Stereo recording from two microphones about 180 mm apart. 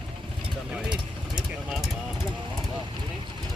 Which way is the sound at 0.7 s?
5° right (ahead or behind).